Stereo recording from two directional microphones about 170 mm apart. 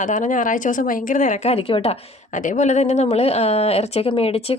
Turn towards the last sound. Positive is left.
turn(degrees=35)  # may be behind; listen again after turning